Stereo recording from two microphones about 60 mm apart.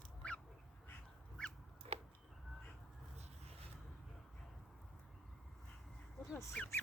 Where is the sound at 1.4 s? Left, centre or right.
Centre.